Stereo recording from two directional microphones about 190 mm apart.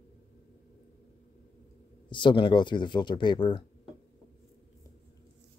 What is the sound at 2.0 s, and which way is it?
Speech, 25° left (ahead or behind).